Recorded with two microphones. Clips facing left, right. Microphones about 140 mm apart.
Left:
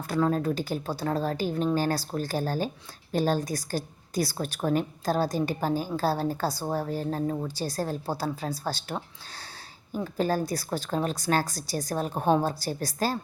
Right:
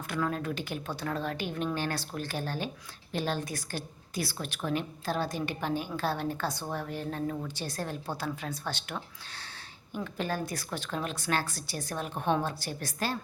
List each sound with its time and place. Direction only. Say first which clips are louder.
0.1 s a woman's voice: left 7 dB; 35° left (ahead or behind)